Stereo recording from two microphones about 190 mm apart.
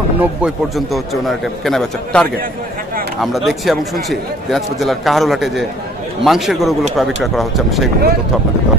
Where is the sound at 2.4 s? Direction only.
50° right (ahead or behind).